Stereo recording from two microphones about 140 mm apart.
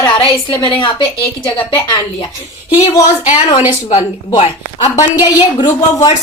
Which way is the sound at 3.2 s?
55° left (ahead or behind).